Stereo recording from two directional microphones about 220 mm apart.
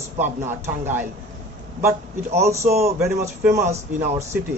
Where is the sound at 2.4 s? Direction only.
15° right (ahead or behind).